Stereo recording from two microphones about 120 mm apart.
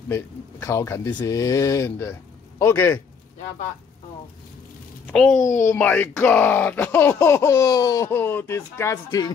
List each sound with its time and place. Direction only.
0.1 s speech: 25° left (ahead or behind)
5.0 s a child's voice: 5° left (ahead or behind); by 8.9 s 20° left (ahead or behind)
8.9 s speech: 30° left (ahead or behind)